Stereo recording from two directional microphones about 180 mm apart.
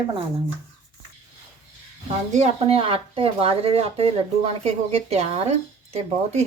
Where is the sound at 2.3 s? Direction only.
35° right (ahead or behind).